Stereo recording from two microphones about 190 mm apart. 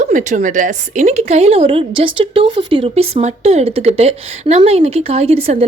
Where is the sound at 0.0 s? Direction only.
40° right (ahead or behind).